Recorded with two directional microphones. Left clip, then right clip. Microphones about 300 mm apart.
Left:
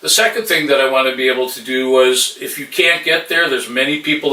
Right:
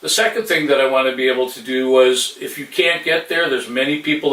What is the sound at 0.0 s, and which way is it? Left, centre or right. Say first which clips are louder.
Speech: left 3 dB; centre.